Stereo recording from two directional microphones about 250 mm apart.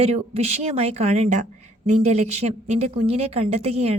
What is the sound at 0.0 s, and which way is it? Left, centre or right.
A woman's voice, right.